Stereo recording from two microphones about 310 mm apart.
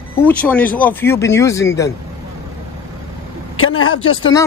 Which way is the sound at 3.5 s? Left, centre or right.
Left.